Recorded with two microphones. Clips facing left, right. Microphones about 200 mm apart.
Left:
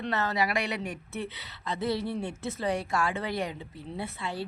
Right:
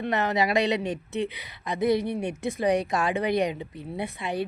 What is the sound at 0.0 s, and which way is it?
Speech, 15° right (ahead or behind).